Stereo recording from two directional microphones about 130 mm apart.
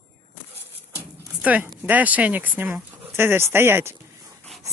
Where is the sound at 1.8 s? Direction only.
10° right (ahead or behind).